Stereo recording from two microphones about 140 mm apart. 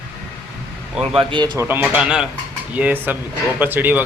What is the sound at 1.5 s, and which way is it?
A man's voice, 15° right (ahead or behind).